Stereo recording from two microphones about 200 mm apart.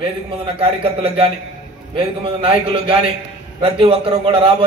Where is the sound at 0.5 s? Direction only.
25° right (ahead or behind).